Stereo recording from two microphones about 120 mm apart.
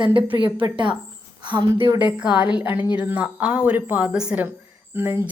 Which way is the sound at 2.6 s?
15° right (ahead or behind).